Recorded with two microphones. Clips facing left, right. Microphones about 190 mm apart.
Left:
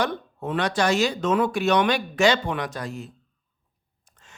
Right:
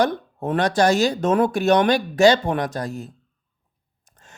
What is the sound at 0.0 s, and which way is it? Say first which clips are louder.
Speech: right 5 dB; 45° right (ahead or behind).